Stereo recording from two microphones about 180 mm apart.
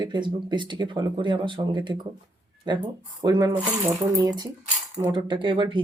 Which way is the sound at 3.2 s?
20° right (ahead or behind).